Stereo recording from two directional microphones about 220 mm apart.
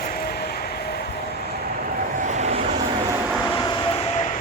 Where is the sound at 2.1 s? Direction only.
35° right (ahead or behind).